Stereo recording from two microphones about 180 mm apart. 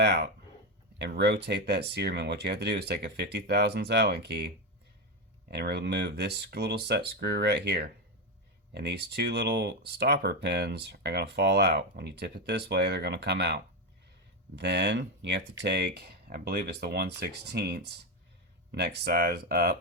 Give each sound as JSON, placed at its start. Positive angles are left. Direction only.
{"t": 0.0, "sound": "speech", "side_deg": -70}